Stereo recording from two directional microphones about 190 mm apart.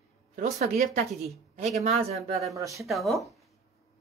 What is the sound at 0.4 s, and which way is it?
Speech, 40° right (ahead or behind).